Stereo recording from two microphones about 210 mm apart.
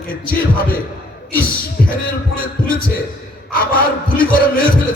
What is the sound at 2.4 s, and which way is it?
A man's voice, 45° left (ahead or behind).